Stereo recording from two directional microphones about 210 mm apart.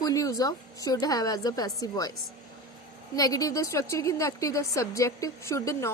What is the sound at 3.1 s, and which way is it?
A woman's voice, 15° left (ahead or behind).